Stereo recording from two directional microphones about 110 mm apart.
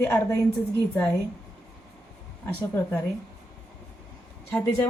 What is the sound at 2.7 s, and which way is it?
Speech, 20° left (ahead or behind).